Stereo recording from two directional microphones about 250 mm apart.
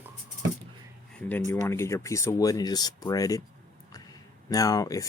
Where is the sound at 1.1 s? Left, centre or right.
Centre.